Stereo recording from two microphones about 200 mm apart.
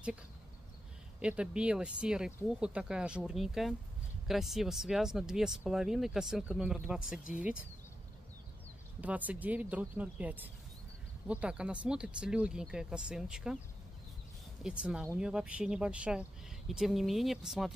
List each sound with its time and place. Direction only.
1.2 s speech: 5° right (ahead or behind)
9.0 s speech: 5° right (ahead or behind)
14.6 s speech: 5° right (ahead or behind)